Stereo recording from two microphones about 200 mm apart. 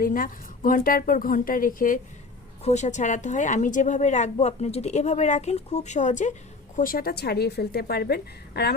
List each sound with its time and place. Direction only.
0.0 s a woman's voice: 45° left (ahead or behind)